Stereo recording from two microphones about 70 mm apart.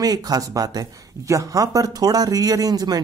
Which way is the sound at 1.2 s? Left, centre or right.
Right.